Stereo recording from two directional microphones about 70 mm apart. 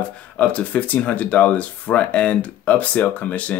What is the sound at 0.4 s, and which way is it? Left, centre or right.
Speech, centre.